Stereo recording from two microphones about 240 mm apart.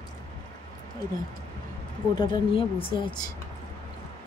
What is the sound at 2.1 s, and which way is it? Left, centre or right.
Speech, left.